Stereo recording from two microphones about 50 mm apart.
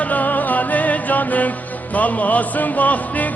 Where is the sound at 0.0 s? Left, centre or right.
Left.